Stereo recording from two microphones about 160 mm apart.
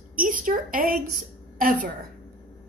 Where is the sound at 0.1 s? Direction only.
60° right (ahead or behind).